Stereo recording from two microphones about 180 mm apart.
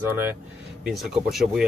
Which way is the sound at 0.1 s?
10° right (ahead or behind).